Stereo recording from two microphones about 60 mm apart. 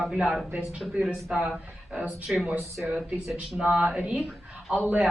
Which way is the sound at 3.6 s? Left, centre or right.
Right.